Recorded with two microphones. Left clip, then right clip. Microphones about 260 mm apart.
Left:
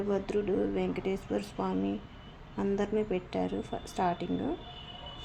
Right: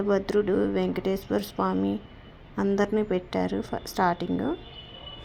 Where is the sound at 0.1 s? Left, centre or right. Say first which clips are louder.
Right 7 dB; centre.